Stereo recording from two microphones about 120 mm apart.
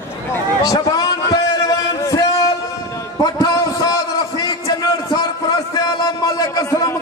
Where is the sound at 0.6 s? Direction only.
30° left (ahead or behind).